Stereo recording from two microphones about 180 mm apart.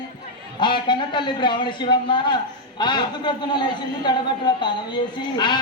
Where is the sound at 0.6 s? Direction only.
25° left (ahead or behind).